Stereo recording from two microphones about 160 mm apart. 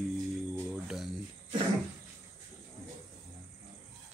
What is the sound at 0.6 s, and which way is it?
Cricket, centre (ahead or behind).